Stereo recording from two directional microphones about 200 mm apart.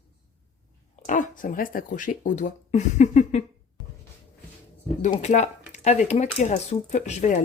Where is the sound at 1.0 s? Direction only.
40° left (ahead or behind).